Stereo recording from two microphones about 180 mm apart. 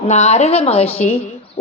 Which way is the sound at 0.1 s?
40° left (ahead or behind).